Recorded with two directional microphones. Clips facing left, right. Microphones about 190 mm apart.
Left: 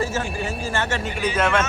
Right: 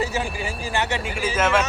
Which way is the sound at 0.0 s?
15° right (ahead or behind).